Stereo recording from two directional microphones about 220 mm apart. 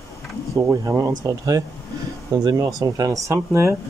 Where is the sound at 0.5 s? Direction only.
15° right (ahead or behind).